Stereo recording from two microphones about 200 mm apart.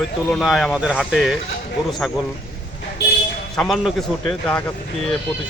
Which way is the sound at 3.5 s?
Centre (ahead or behind).